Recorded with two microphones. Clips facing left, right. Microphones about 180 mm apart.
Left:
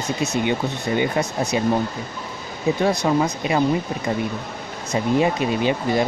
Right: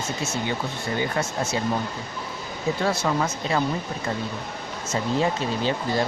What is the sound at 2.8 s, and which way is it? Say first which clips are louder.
Speech: left 5 dB; 15° left (ahead or behind).